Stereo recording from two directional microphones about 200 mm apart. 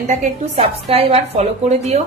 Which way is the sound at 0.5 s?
30° right (ahead or behind).